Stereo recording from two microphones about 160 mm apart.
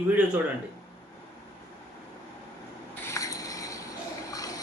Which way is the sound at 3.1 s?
20° left (ahead or behind).